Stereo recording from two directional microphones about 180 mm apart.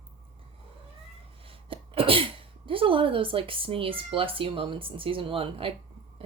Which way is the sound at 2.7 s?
30° right (ahead or behind).